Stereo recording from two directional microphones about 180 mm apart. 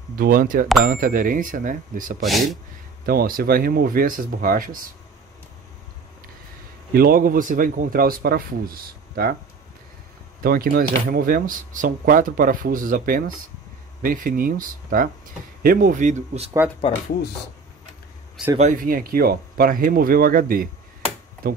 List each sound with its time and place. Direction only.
0.1 s speech: 55° right (ahead or behind)
2.2 s speech: centre (ahead or behind)
3.1 s speech: 55° right (ahead or behind)
6.9 s speech: 55° right (ahead or behind)
10.4 s speech: 55° right (ahead or behind); by 16.5 s 40° right (ahead or behind)
18.6 s speech: 45° right (ahead or behind)